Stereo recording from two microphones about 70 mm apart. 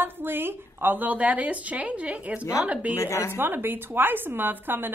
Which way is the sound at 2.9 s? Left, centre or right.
Left.